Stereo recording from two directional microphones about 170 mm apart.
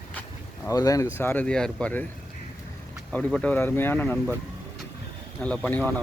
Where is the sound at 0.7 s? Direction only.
20° left (ahead or behind).